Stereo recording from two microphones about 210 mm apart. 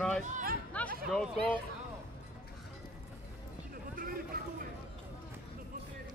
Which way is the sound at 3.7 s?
45° right (ahead or behind).